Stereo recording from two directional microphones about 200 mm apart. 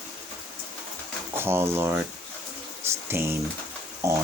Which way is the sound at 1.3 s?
10° right (ahead or behind).